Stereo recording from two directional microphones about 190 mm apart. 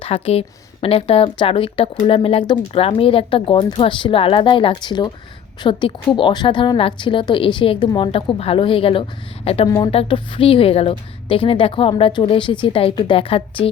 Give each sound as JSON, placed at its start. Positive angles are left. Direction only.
{"t": 0.0, "sound": "a woman's voice", "side_deg": 30}
{"t": 9.6, "sound": "speech", "side_deg": 20}
{"t": 9.9, "sound": "a woman's voice", "side_deg": 30}